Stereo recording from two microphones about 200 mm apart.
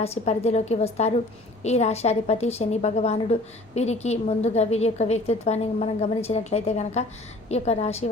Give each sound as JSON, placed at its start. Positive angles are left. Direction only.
{"t": 0.0, "sound": "a woman's voice", "side_deg": 30}